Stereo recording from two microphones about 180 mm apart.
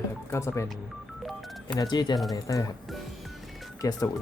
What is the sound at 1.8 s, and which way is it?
Speech, 25° left (ahead or behind).